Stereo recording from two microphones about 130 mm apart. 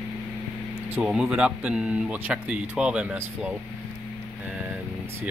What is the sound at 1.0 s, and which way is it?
Speech, 5° right (ahead or behind).